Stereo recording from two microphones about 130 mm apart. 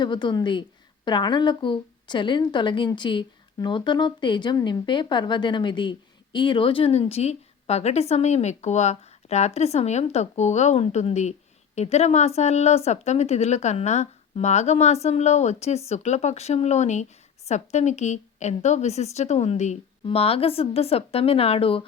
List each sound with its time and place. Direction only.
0.0 s a woman's voice: 35° left (ahead or behind); by 19.8 s 60° left (ahead or behind)
20.1 s speech: 45° left (ahead or behind)